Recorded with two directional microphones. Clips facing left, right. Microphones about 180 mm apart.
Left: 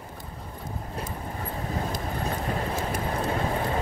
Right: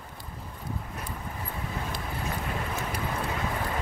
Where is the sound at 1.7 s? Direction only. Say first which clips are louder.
Left 6 dB; 35° left (ahead or behind).